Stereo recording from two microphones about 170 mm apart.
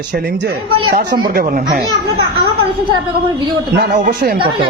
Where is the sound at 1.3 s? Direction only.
60° right (ahead or behind).